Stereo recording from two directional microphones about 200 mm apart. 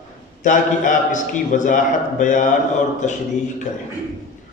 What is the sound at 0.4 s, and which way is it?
A man's voice, 40° left (ahead or behind).